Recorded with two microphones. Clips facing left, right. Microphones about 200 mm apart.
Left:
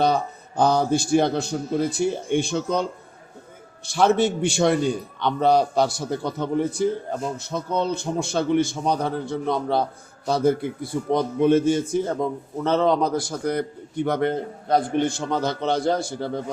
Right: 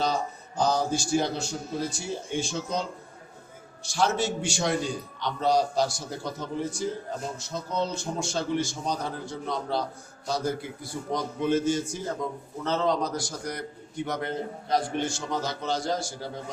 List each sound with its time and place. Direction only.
0.0 s a man's voice: 60° left (ahead or behind)
3.8 s a man's voice: 55° left (ahead or behind)